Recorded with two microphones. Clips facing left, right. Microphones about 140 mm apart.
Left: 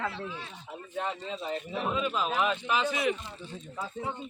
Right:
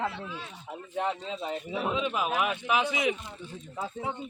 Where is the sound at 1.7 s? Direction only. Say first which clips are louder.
Right 1 dB; 15° right (ahead or behind).